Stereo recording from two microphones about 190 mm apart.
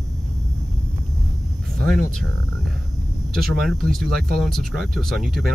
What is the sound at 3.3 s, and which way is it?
Speech, centre (ahead or behind).